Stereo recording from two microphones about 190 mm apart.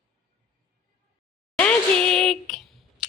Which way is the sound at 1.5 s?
5° left (ahead or behind).